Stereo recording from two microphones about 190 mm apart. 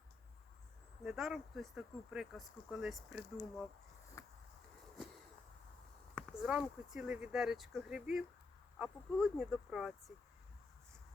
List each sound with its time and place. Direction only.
1.0 s speech: centre (ahead or behind)
4.2 s a sound: 15° left (ahead or behind)
6.1 s speech: 5° right (ahead or behind)